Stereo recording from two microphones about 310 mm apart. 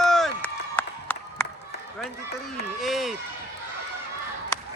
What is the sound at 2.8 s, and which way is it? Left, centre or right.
Run, centre.